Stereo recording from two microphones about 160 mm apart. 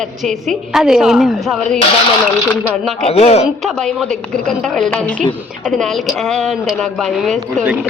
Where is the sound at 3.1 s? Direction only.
40° left (ahead or behind).